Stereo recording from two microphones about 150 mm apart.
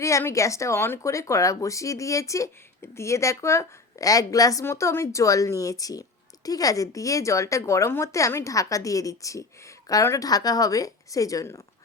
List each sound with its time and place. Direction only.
0.0 s speech: 20° left (ahead or behind)